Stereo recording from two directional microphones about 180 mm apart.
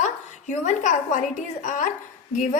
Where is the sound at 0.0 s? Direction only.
40° left (ahead or behind).